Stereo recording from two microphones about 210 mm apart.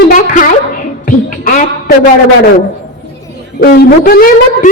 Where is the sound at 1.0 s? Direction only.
40° left (ahead or behind).